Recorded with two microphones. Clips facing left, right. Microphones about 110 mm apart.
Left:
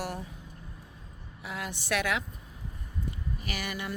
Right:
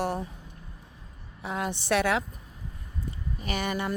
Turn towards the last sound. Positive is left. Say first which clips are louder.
# right 6 dB
turn(degrees=-35)  # may be behind; listen again after turning